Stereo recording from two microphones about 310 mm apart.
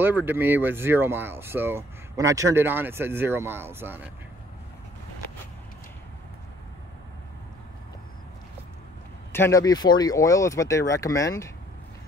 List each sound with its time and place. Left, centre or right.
0.0 s speech: centre
9.3 s speech: centre